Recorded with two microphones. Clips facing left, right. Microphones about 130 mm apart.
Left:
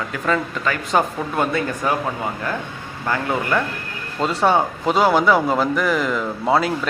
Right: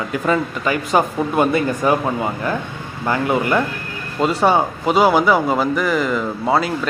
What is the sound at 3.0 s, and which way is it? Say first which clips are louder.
Speech: right 4 dB; 15° right (ahead or behind).